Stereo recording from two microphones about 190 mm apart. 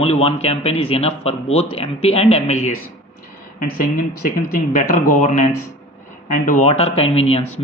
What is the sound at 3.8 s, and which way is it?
Speech, 50° left (ahead or behind).